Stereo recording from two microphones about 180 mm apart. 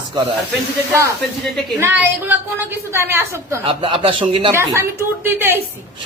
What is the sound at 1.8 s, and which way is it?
A woman's voice, 10° right (ahead or behind).